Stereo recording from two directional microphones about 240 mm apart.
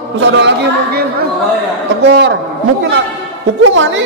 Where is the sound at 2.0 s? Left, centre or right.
Right.